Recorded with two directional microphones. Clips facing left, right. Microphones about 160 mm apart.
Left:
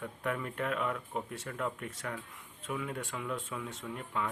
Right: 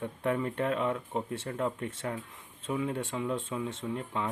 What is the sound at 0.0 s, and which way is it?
Speech, 30° right (ahead or behind).